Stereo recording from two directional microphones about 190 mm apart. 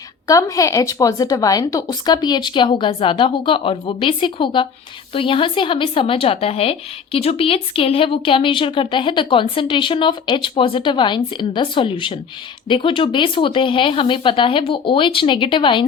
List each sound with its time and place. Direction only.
0.3 s speech: 15° left (ahead or behind)